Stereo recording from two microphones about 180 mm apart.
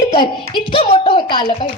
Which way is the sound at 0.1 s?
25° left (ahead or behind).